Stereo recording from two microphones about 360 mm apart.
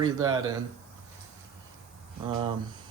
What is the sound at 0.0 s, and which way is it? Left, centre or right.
Speech, centre.